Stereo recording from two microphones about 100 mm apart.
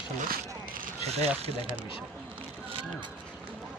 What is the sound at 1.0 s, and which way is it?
Speech, 90° right.